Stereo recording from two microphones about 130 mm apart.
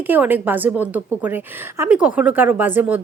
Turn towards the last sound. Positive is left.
turn(degrees=-15)  # may be behind; listen again after turning